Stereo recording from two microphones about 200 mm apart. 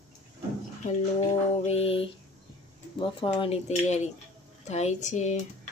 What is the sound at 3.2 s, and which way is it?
Speech, 25° left (ahead or behind).